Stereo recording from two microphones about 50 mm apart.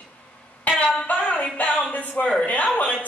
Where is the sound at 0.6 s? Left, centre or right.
Left.